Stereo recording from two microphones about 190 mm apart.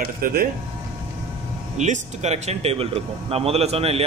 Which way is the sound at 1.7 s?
40° right (ahead or behind).